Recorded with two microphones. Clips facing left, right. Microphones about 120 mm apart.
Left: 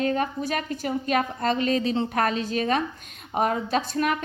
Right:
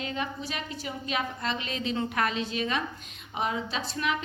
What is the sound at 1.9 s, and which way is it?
Speech, 30° left (ahead or behind).